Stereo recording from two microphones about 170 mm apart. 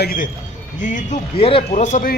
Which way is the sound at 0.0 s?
60° left (ahead or behind).